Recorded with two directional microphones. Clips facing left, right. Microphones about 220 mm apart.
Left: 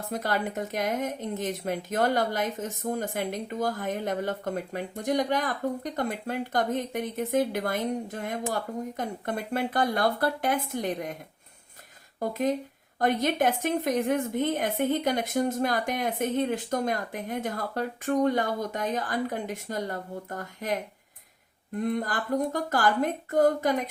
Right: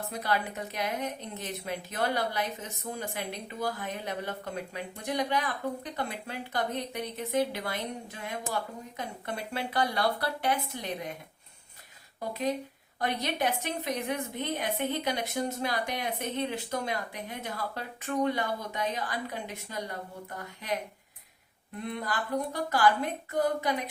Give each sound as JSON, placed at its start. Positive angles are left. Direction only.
{"t": 0.1, "sound": "a woman's voice", "side_deg": 45}
{"t": 12.2, "sound": "a woman's voice", "side_deg": 45}
{"t": 21.8, "sound": "a woman's voice", "side_deg": 45}